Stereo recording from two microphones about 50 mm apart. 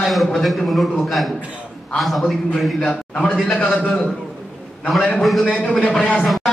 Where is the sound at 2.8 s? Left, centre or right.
Left.